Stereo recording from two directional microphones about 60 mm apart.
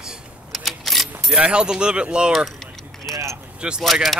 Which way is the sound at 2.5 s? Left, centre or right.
Centre.